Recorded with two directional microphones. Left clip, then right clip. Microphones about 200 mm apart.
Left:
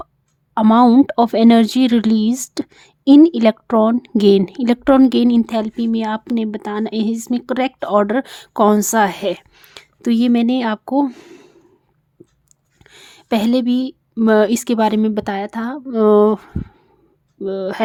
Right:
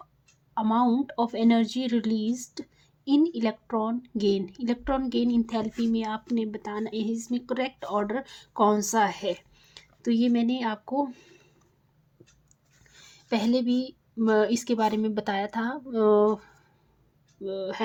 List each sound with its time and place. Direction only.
0.5 s speech: 55° left (ahead or behind)
12.8 s a woman's voice: 45° left (ahead or behind)